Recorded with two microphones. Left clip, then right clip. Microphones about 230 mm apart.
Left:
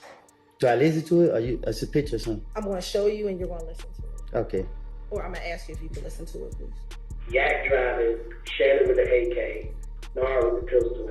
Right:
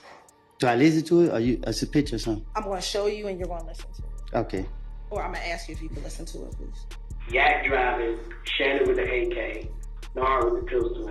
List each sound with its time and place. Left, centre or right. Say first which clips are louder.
0.6 s speech: even; centre